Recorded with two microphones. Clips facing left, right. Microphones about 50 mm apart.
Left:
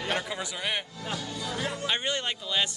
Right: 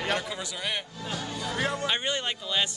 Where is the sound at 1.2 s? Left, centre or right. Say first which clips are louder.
Right 5 dB; right.